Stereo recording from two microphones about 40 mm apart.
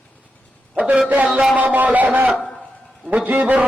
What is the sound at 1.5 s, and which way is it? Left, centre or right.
Speech, right.